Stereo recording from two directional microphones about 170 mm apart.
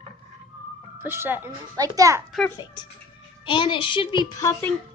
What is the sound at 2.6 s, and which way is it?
A woman's voice, 25° left (ahead or behind).